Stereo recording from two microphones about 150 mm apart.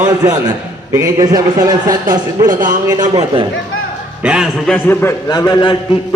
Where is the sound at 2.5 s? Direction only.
65° right (ahead or behind).